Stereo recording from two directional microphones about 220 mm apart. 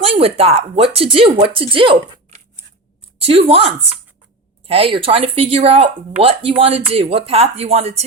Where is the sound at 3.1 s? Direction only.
25° right (ahead or behind).